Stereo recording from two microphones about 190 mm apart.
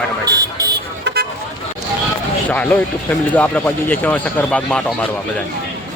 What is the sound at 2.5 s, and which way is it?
Speech, 10° left (ahead or behind).